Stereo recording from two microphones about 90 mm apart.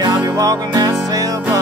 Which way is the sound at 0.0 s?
45° right (ahead or behind).